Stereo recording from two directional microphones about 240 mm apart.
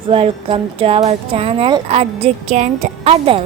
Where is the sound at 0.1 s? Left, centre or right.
Right.